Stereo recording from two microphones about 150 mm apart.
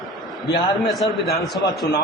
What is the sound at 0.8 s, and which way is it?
Speech, centre (ahead or behind).